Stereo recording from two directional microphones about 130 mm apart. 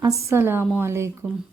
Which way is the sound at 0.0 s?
25° right (ahead or behind).